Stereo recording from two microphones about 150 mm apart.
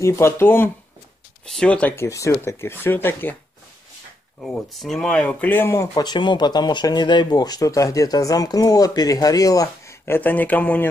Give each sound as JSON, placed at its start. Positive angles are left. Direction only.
{"t": 0.0, "sound": "speech", "side_deg": 15}
{"t": 4.4, "sound": "speech", "side_deg": 0}